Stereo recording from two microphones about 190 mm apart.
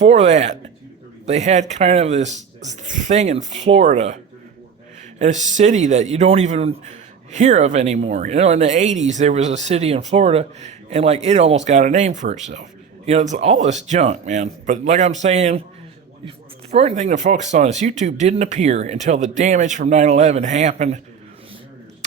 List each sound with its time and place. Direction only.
0.0 s speech: 35° right (ahead or behind)
5.2 s speech: 40° right (ahead or behind)
16.7 s speech: 35° right (ahead or behind)